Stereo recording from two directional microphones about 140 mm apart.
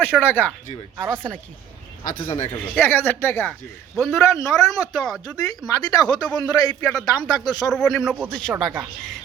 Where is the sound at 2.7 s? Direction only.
15° left (ahead or behind).